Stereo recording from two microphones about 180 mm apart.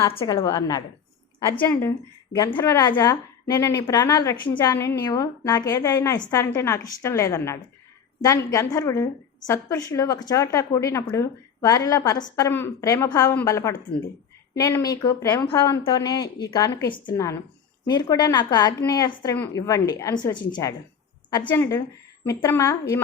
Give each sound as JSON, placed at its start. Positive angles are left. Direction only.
{"t": 0.1, "sound": "a woman's voice", "side_deg": 30}
{"t": 0.3, "sound": "a woman's voice", "side_deg": 20}
{"t": 2.7, "sound": "a woman's voice", "side_deg": 20}